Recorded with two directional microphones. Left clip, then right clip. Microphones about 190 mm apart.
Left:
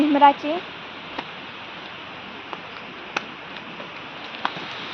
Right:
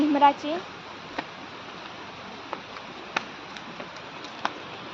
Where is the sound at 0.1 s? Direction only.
55° left (ahead or behind).